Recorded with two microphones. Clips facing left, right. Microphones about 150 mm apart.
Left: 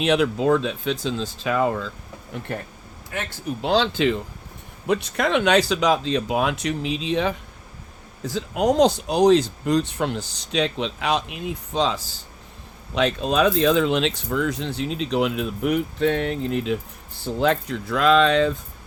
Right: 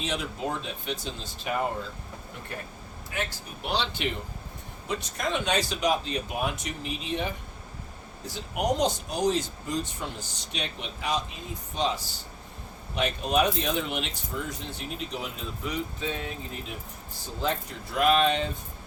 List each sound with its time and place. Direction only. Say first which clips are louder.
0.0 s speech: left 12 dB; 75° left (ahead or behind); by 1.8 s 90° left
3.6 s speech: left 9 dB; 90° left
4.9 s speech: left 9 dB; 70° left (ahead or behind); by 7.3 s 90° left
8.4 s speech: left 8 dB; 90° left